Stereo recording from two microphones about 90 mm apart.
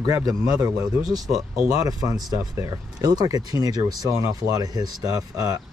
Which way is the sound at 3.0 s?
45° right (ahead or behind).